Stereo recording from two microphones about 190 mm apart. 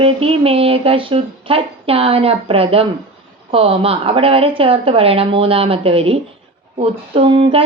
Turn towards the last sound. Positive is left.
turn(degrees=-30)  # may be behind; listen again after turning